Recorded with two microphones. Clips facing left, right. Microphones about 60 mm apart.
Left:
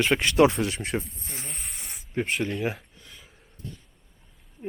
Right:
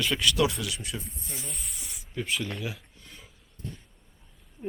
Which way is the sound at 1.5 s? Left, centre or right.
Left.